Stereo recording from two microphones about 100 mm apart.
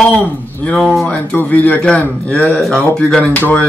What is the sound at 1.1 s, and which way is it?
A man's voice, 15° left (ahead or behind).